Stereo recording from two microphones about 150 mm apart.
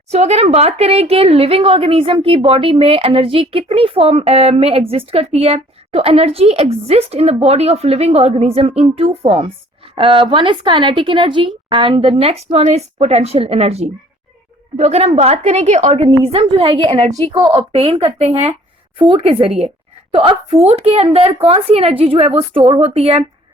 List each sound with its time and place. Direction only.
0.1 s a woman's voice: 45° right (ahead or behind)